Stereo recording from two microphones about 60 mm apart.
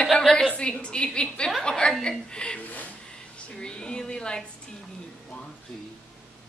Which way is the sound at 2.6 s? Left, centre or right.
Left.